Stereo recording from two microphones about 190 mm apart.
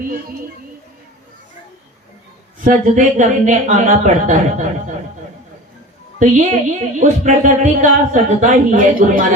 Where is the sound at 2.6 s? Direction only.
40° right (ahead or behind).